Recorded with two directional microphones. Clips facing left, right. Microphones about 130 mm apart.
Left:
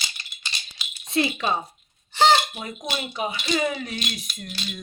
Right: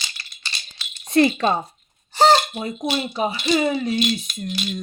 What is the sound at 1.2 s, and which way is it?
Speech, 50° right (ahead or behind).